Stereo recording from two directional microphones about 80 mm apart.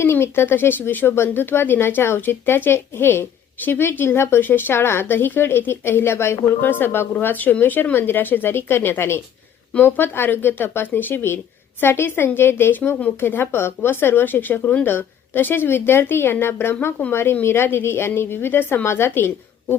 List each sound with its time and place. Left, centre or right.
0.0 s speech: left